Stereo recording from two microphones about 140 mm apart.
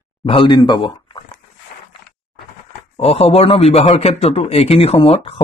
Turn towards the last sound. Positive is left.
turn(degrees=40)  # may be behind; listen again after turning